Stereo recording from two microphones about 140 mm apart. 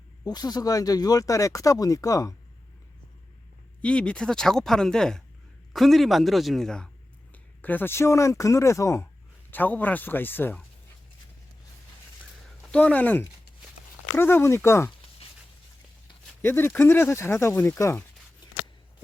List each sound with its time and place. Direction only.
0.3 s speech: 30° left (ahead or behind)
3.8 s speech: 10° left (ahead or behind)
12.6 s speech: 10° left (ahead or behind)
16.4 s speech: 15° left (ahead or behind)